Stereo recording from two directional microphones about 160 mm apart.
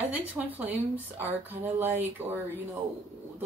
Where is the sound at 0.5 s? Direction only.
10° right (ahead or behind).